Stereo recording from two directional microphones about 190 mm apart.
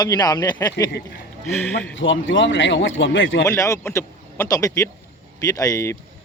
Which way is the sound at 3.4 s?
15° left (ahead or behind).